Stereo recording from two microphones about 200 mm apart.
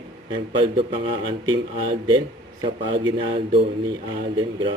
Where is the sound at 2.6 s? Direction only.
25° right (ahead or behind).